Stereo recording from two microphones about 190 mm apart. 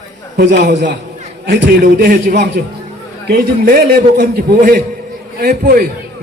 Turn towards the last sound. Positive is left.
turn(degrees=-55)  # may be behind; listen again after turning